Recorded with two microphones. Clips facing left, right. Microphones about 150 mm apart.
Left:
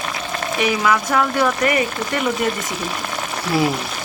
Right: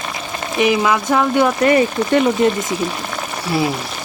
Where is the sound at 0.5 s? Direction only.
20° right (ahead or behind).